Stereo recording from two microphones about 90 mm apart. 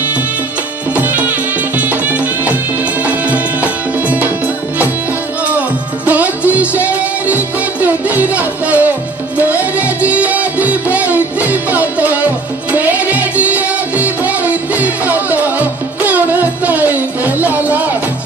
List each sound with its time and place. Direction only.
0.9 s music: 20° right (ahead or behind)
5.5 s music: 20° right (ahead or behind)